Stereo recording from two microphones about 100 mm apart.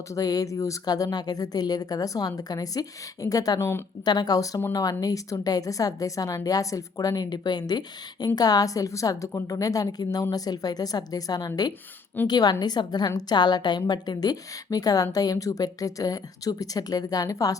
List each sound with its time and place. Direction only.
0.1 s a woman's voice: 35° left (ahead or behind)
3.6 s a woman's voice: 25° left (ahead or behind)
4.0 s a woman's voice: 45° left (ahead or behind)